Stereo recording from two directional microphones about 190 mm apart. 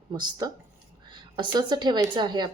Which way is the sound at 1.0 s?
25° right (ahead or behind).